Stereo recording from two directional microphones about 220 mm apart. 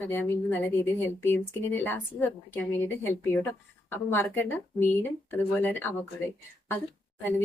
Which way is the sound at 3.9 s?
10° left (ahead or behind).